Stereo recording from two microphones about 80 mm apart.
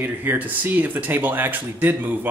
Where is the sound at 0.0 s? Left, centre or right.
Right.